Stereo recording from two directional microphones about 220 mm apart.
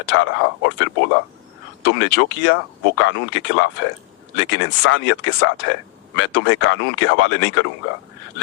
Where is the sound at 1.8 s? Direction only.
60° left (ahead or behind).